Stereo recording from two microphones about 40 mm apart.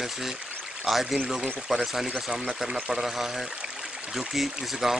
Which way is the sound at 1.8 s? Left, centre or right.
Centre.